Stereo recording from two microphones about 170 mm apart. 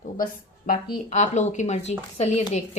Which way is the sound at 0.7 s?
50° left (ahead or behind).